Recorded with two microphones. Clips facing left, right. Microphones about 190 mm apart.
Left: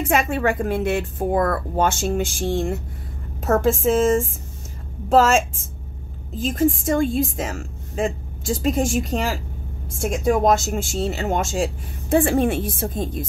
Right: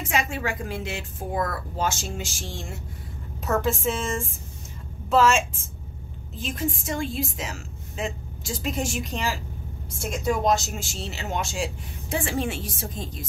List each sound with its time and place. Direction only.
0.0 s a woman's voice: 55° left (ahead or behind)
3.4 s a woman's voice: 45° left (ahead or behind)